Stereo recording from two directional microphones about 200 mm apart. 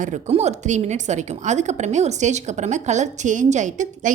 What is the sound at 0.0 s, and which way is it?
A woman's voice, 35° right (ahead or behind).